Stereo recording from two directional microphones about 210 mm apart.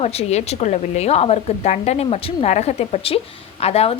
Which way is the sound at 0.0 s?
30° left (ahead or behind).